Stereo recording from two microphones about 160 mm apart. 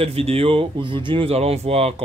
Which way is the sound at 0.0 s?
40° right (ahead or behind).